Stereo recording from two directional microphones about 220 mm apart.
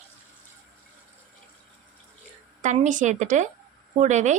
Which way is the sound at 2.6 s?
35° right (ahead or behind).